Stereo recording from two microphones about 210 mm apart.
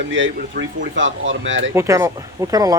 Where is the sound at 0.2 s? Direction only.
60° right (ahead or behind).